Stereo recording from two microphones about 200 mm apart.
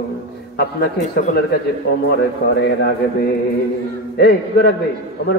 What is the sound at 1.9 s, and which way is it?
Speech, 60° left (ahead or behind).